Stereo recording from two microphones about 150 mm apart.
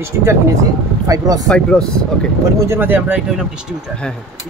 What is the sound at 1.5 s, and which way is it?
Speech, 5° left (ahead or behind).